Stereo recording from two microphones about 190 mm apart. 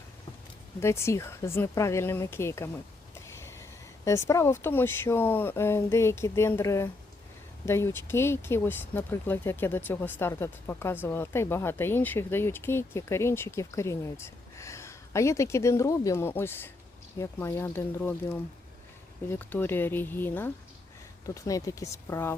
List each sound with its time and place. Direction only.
0.8 s speech: 15° left (ahead or behind)